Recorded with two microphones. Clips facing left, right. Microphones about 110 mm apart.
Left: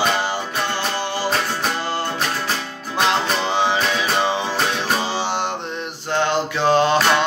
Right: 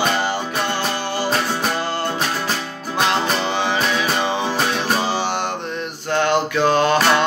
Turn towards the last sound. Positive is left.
turn(degrees=25)  # may be behind; listen again after turning